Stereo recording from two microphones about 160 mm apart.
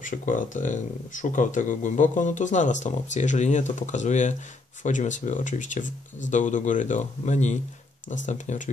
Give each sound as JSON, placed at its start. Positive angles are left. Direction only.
{"t": 0.0, "sound": "speech", "side_deg": 55}